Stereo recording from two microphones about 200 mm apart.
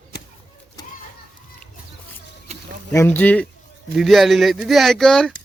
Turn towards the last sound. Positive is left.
turn(degrees=5)  # may be behind; listen again after turning